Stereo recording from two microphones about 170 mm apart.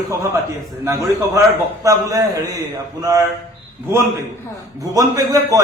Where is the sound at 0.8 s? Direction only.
15° right (ahead or behind).